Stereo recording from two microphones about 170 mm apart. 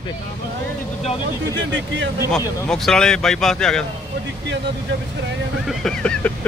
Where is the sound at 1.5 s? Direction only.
90° right.